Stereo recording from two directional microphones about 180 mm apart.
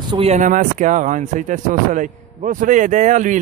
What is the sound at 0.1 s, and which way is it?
Speech, 35° right (ahead or behind).